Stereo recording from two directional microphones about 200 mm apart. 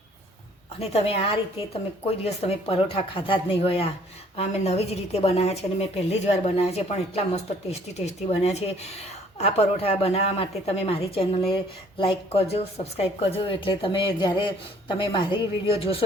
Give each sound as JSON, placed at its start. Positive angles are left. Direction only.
{"t": 0.8, "sound": "a woman's voice", "side_deg": 30}